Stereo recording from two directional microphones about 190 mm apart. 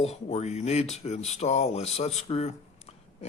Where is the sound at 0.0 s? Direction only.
35° left (ahead or behind).